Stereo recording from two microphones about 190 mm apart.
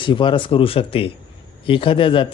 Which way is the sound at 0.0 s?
25° left (ahead or behind).